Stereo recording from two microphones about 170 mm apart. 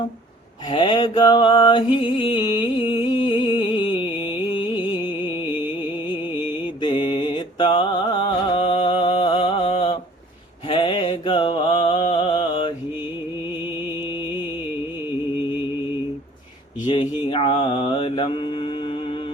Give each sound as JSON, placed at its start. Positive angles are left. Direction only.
{"t": 0.7, "sound": "mantra", "side_deg": 30}
{"t": 2.8, "sound": "music", "side_deg": 30}
{"t": 5.4, "sound": "mantra", "side_deg": -10}
{"t": 6.8, "sound": "music", "side_deg": 30}
{"t": 10.7, "sound": "mantra", "side_deg": 30}
{"t": 13.5, "sound": "music", "side_deg": -10}
{"t": 14.1, "sound": "music", "side_deg": 30}
{"t": 16.8, "sound": "a sound", "side_deg": 30}
{"t": 17.2, "sound": "mantra", "side_deg": 30}